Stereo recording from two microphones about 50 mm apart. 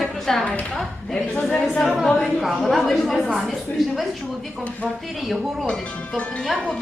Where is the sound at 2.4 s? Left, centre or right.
Centre.